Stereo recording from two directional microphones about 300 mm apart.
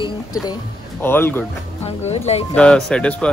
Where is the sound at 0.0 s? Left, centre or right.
Centre.